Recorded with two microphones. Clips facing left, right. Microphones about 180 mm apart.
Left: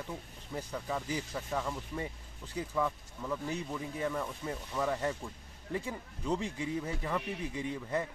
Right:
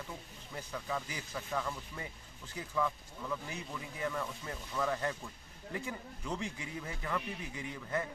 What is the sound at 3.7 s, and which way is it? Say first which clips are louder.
Speech: even; 20° left (ahead or behind).